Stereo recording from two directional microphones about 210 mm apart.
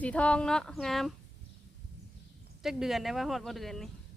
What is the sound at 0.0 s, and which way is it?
Speech, 5° left (ahead or behind).